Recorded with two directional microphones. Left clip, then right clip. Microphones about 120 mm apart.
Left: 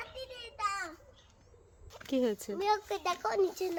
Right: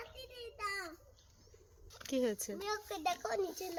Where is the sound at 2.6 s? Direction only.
35° left (ahead or behind).